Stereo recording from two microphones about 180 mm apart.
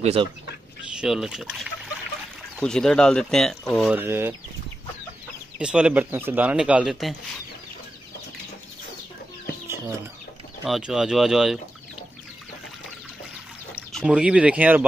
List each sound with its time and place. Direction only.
0.0 s speech: 35° right (ahead or behind)
0.9 s speech: centre (ahead or behind)
3.9 s speech: 10° right (ahead or behind)
5.6 s speech: 5° right (ahead or behind)
10.6 s speech: 5° right (ahead or behind)
13.9 s speech: 5° right (ahead or behind)